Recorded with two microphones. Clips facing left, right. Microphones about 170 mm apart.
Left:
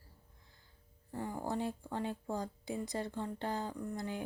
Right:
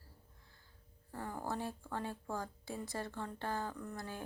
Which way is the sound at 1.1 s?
15° left (ahead or behind).